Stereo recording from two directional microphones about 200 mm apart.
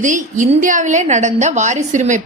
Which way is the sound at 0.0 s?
40° right (ahead or behind).